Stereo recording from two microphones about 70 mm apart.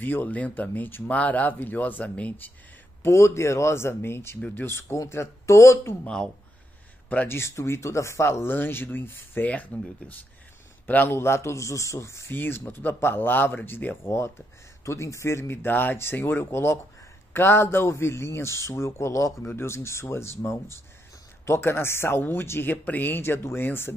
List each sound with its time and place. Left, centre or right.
0.0 s speech: left
3.0 s speech: left
6.0 s speech: centre
7.2 s speech: left
11.1 s speech: left
12.3 s speech: left
14.9 s speech: left